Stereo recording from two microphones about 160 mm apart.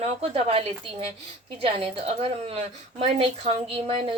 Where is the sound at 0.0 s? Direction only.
40° right (ahead or behind).